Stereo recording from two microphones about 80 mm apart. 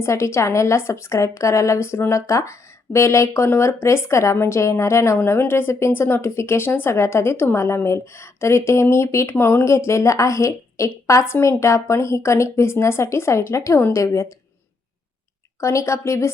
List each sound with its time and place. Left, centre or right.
0.0 s speech: left
15.6 s speech: left